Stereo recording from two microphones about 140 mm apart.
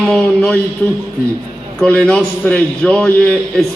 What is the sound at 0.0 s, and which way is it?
Speech, 5° left (ahead or behind).